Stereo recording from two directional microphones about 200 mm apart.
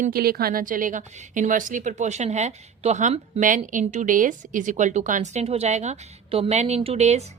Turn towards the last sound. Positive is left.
turn(degrees=-35)  # may be behind; listen again after turning